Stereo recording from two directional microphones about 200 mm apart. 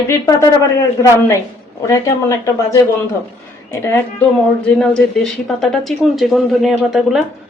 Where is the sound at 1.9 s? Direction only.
15° left (ahead or behind); by 7.2 s centre (ahead or behind).